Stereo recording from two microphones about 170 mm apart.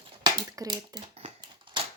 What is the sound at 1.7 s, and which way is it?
Typewriter, 30° right (ahead or behind).